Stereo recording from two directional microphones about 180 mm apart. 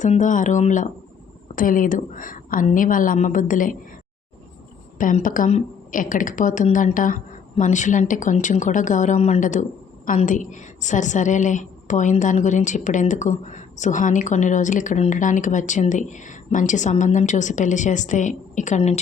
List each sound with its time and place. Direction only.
0.0 s a woman's voice: 45° left (ahead or behind)
4.9 s a woman's voice: 45° left (ahead or behind)